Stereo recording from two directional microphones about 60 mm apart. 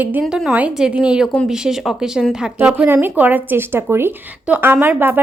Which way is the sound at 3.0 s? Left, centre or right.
Right.